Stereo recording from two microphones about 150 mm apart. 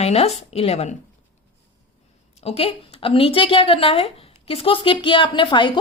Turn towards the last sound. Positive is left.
turn(degrees=30)  # may be behind; listen again after turning